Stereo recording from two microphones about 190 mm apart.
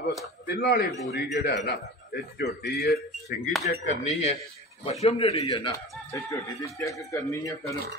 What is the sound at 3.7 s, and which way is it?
A man's voice, 35° left (ahead or behind).